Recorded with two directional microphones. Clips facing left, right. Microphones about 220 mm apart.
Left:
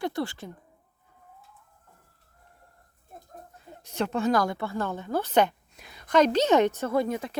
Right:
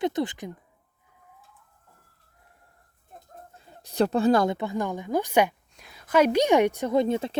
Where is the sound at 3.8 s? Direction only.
35° right (ahead or behind); by 5.5 s 10° right (ahead or behind).